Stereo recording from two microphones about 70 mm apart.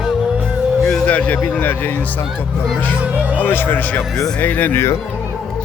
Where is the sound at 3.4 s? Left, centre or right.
Left.